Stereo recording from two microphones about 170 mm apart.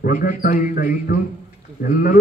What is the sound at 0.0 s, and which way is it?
A man's voice, 55° left (ahead or behind).